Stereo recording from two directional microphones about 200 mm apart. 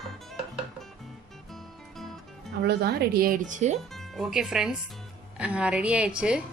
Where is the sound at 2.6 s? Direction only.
55° right (ahead or behind); by 3.8 s 35° right (ahead or behind).